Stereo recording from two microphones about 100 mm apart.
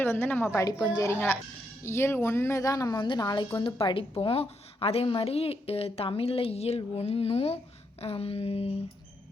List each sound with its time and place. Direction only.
0.0 s speech: 20° left (ahead or behind)
0.7 s speech: 40° left (ahead or behind)
1.1 s speech: 25° left (ahead or behind); by 3.2 s 45° left (ahead or behind)
3.8 s a woman's voice: 60° left (ahead or behind); by 7.6 s 90° left
8.0 s a sound: 75° left (ahead or behind)